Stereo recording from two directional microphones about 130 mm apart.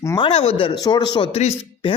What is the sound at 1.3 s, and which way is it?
Speech, 55° left (ahead or behind).